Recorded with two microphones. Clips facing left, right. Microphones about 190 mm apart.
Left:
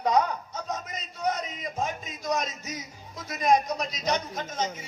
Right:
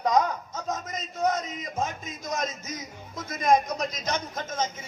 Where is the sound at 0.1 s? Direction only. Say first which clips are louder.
Even; 45° right (ahead or behind).